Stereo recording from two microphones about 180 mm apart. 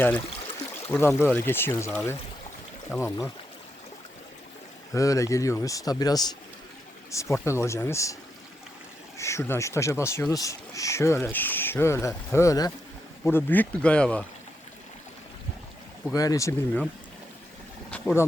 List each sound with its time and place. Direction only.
0.9 s speech: 10° left (ahead or behind)
4.9 s speech: 15° left (ahead or behind)
9.1 s speech: 15° left (ahead or behind)
16.1 s speech: 20° left (ahead or behind)
17.9 s speech: 10° left (ahead or behind)